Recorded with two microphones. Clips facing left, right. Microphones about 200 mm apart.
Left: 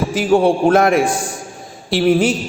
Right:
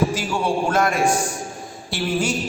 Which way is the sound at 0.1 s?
55° left (ahead or behind).